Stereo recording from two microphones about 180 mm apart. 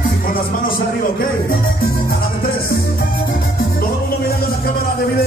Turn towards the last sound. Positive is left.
turn(degrees=55)  # may be behind; listen again after turning